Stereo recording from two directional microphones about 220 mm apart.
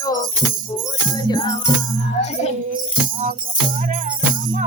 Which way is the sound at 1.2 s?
20° left (ahead or behind).